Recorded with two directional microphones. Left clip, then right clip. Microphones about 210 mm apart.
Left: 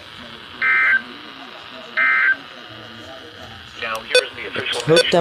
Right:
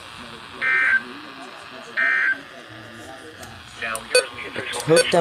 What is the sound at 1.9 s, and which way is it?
Buzzer, 10° left (ahead or behind).